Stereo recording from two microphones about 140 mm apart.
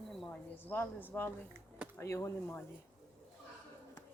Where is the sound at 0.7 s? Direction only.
15° left (ahead or behind).